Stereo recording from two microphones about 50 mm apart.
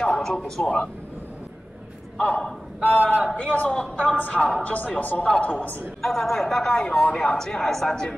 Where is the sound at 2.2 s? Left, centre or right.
Left.